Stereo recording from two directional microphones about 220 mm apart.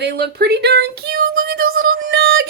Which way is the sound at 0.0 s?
50° right (ahead or behind).